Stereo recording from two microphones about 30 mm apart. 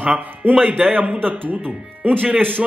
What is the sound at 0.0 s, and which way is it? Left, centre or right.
Speech, right.